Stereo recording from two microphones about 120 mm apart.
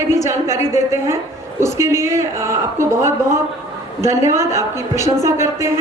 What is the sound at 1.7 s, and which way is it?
Speech, 25° right (ahead or behind).